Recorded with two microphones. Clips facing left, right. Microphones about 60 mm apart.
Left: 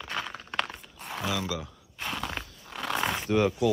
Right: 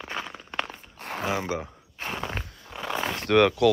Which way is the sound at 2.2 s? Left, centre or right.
Centre.